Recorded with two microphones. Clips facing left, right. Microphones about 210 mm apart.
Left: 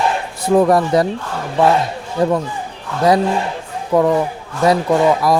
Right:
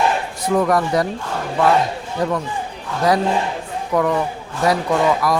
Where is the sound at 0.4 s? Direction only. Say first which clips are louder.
Left 5 dB; 30° left (ahead or behind).